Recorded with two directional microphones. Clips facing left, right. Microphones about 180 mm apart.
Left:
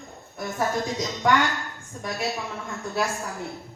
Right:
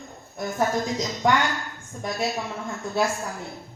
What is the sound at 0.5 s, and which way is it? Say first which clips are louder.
Speech: right 2 dB; 15° right (ahead or behind).